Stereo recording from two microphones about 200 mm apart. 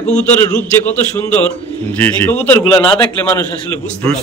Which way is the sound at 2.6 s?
25° left (ahead or behind).